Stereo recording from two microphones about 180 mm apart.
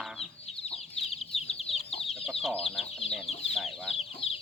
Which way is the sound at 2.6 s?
Centre (ahead or behind).